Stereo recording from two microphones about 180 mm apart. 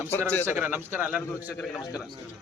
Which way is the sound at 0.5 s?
10° right (ahead or behind).